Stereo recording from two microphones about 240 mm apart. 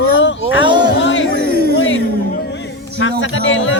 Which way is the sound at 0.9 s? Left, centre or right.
Left.